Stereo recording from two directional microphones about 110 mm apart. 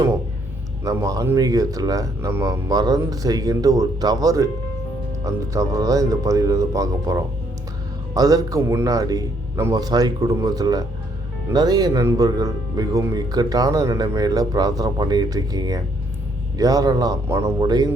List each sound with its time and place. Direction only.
0.9 s speech: 30° right (ahead or behind)